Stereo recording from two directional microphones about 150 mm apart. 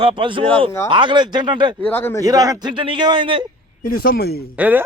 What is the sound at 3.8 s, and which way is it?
Speech, 75° left (ahead or behind).